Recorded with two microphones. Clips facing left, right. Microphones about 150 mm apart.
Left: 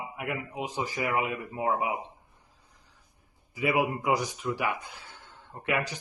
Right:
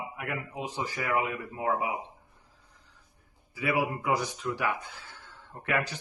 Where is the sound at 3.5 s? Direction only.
20° left (ahead or behind).